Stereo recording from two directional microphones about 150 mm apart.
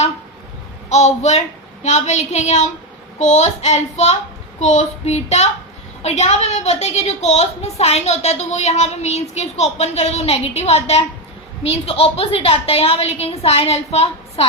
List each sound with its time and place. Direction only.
0.9 s a woman's voice: 50° left (ahead or behind)